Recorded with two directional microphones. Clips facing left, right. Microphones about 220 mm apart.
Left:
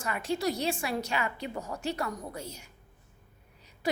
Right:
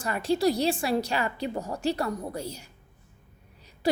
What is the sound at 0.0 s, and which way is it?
A woman's voice, 35° right (ahead or behind).